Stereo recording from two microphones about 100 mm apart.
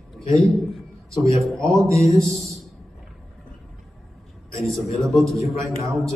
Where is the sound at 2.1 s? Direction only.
Centre (ahead or behind).